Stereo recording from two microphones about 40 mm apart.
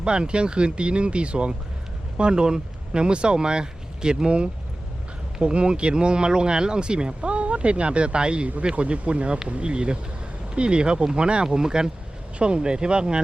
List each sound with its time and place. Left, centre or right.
0.0 s speech: right